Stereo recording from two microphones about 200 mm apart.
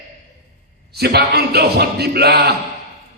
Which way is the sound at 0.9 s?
55° right (ahead or behind).